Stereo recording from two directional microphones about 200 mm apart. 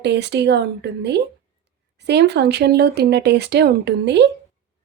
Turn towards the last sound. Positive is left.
turn(degrees=-60)  # may be behind; listen again after turning